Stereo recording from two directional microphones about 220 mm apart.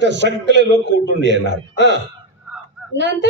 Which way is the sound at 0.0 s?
55° right (ahead or behind).